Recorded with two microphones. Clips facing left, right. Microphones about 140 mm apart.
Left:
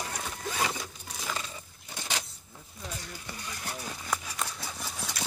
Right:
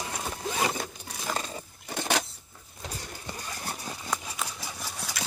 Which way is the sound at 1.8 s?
65° right (ahead or behind).